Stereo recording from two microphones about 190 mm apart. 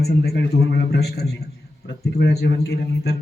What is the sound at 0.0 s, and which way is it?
A man's voice, 55° left (ahead or behind).